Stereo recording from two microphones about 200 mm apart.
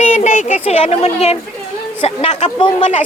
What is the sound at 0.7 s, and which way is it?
Speech, 30° left (ahead or behind).